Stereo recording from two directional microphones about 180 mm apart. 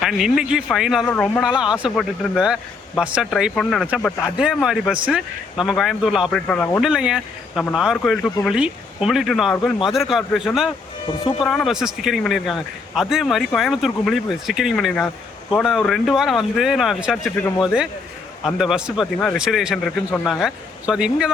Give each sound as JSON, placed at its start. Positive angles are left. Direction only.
{"t": 0.0, "sound": "speech", "side_deg": 0}
{"t": 1.0, "sound": "speech", "side_deg": 10}
{"t": 1.4, "sound": "speech", "side_deg": -5}
{"t": 6.9, "sound": "speech", "side_deg": -5}
{"t": 11.1, "sound": "speech", "side_deg": 30}
{"t": 11.4, "sound": "speech", "side_deg": 0}